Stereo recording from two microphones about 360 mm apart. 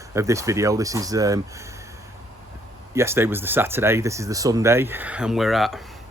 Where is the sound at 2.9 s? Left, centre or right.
Centre.